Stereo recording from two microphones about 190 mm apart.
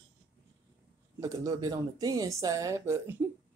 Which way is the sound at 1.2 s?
15° right (ahead or behind).